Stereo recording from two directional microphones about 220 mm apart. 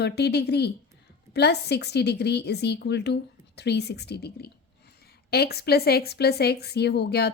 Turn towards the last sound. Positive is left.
turn(degrees=45)  # may be behind; listen again after turning